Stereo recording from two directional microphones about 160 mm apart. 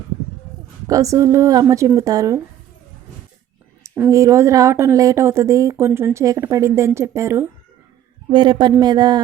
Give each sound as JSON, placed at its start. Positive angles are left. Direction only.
{"t": 0.9, "sound": "speech", "side_deg": -20}
{"t": 3.9, "sound": "speech", "side_deg": -15}
{"t": 8.3, "sound": "speech", "side_deg": -30}